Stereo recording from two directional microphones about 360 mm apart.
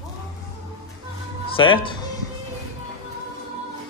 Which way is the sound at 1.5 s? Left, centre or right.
Centre.